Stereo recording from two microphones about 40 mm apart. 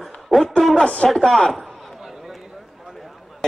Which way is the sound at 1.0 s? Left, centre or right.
Centre.